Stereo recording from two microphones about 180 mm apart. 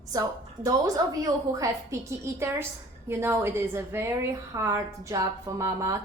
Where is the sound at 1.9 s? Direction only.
15° right (ahead or behind).